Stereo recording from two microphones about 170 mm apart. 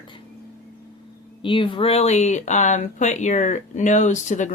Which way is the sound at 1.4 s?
30° left (ahead or behind).